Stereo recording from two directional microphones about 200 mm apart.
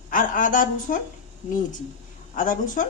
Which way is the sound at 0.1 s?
40° left (ahead or behind).